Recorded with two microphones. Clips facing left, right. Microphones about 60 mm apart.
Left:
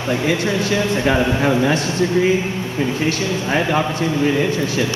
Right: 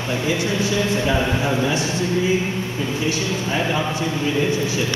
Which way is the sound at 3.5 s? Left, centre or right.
Left.